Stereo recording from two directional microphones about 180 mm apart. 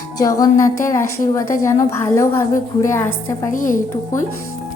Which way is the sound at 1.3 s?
15° left (ahead or behind).